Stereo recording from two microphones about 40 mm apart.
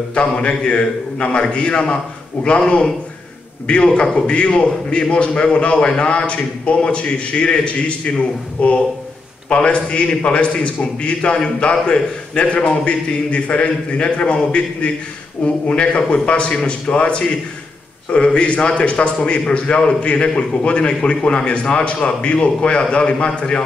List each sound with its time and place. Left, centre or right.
0.1 s a man's voice: left
3.6 s a man's voice: left